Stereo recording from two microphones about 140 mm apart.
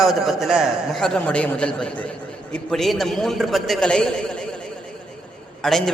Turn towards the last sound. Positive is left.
turn(degrees=0)  # may be behind; listen again after turning